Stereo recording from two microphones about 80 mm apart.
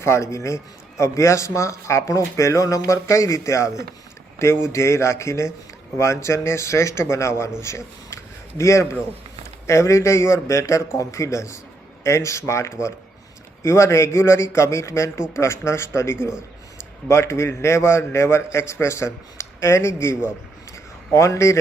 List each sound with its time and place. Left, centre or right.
0.0 s a man's voice: left